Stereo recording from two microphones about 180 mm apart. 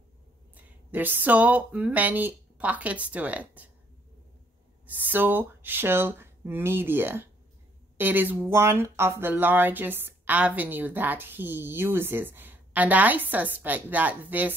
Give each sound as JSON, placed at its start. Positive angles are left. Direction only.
{"t": 0.6, "sound": "speech", "side_deg": -10}
{"t": 4.8, "sound": "speech", "side_deg": -10}